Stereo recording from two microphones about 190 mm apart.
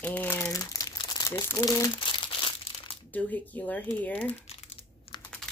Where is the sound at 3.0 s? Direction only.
10° left (ahead or behind).